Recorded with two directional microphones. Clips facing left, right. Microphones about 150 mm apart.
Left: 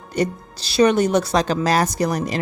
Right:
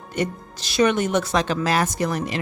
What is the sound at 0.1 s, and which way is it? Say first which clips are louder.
A woman's voice: left 4 dB; 35° left (ahead or behind).